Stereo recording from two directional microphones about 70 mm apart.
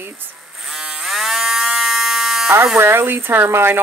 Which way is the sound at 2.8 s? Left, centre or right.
Right.